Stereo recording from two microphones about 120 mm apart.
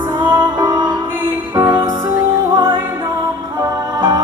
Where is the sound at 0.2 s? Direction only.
40° right (ahead or behind).